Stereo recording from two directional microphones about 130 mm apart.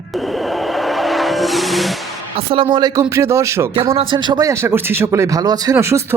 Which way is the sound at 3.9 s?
45° right (ahead or behind).